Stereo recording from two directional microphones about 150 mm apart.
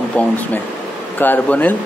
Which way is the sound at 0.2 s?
10° left (ahead or behind).